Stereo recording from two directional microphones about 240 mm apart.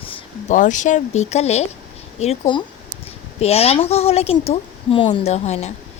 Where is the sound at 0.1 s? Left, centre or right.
Left.